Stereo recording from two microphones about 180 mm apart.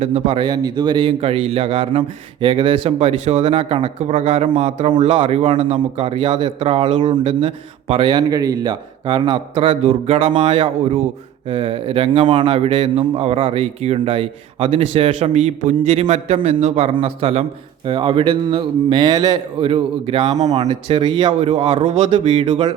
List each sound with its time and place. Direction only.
0.0 s a man's voice: 35° right (ahead or behind)